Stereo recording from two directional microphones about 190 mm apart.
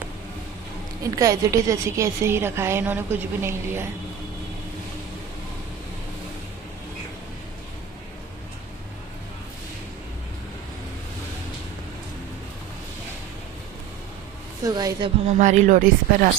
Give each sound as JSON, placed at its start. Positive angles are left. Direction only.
{"t": 1.1, "sound": "a woman's voice", "side_deg": -20}
{"t": 14.6, "sound": "a woman's voice", "side_deg": -20}
{"t": 15.3, "sound": "speech", "side_deg": -40}